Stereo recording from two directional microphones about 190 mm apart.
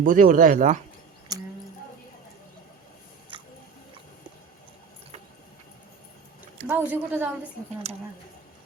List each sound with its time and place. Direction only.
0.0 s speech: 45° right (ahead or behind)
1.3 s a sound: 20° right (ahead or behind)
6.7 s a woman's voice: 10° right (ahead or behind)
7.9 s speech: 35° right (ahead or behind)